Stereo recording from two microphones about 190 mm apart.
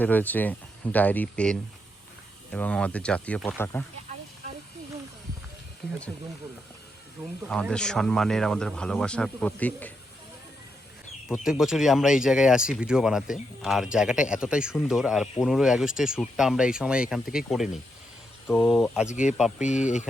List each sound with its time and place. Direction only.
0.0 s speech: 10° left (ahead or behind)
7.4 s speech: 5° left (ahead or behind)
11.3 s speech: 5° right (ahead or behind)
19.0 s speech: 40° left (ahead or behind)
19.4 s speech: centre (ahead or behind)
19.6 s speech: 40° left (ahead or behind)